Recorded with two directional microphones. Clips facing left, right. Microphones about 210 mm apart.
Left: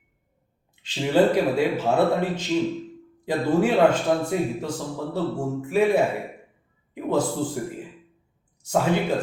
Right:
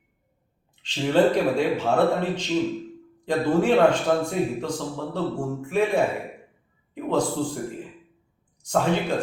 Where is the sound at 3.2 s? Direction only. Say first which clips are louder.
Even; 5° left (ahead or behind).